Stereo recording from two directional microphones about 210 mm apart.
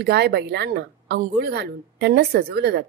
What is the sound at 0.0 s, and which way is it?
A woman's voice, 50° right (ahead or behind).